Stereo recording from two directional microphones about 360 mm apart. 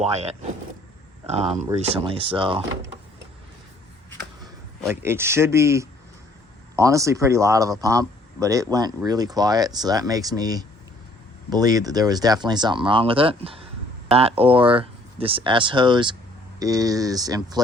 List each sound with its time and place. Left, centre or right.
0.0 s speech: centre
4.8 s speech: centre